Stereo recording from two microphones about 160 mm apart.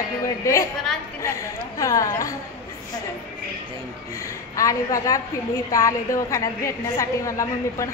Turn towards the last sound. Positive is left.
turn(degrees=20)  # may be behind; listen again after turning